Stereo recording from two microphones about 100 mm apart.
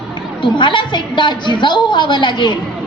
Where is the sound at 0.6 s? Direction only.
50° left (ahead or behind).